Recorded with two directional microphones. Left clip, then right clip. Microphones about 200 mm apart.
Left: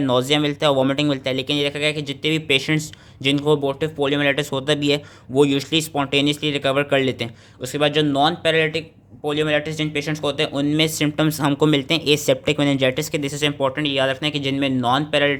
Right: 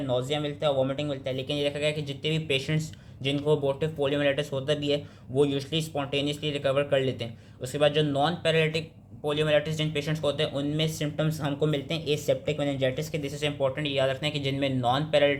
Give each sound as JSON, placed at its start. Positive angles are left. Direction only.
{"t": 0.1, "sound": "speech", "side_deg": 45}